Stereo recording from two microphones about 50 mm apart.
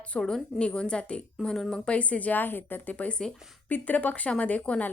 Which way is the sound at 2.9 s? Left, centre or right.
Left.